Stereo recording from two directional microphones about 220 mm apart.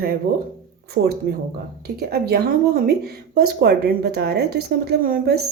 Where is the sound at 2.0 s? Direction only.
45° right (ahead or behind).